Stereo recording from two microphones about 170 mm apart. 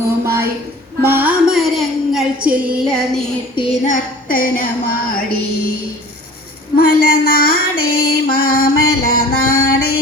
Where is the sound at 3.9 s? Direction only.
55° left (ahead or behind).